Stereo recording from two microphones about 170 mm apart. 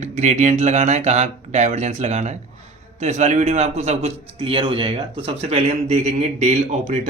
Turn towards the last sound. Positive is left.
turn(degrees=-45)  # may be behind; listen again after turning